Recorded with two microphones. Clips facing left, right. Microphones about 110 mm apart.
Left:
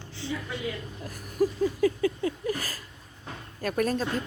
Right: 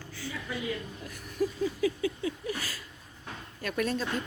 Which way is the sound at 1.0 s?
45° left (ahead or behind).